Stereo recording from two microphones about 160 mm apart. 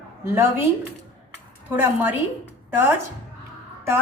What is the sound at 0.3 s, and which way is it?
Speech, 15° right (ahead or behind).